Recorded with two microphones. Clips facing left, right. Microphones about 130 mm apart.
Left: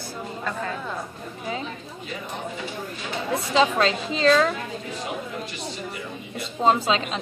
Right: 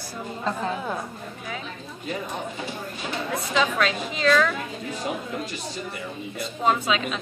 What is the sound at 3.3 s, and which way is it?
A woman's voice, 30° left (ahead or behind).